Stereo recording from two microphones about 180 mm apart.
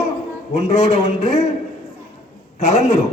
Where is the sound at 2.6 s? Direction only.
40° left (ahead or behind).